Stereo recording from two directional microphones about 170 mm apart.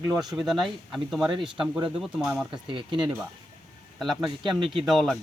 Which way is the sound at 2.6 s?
30° right (ahead or behind).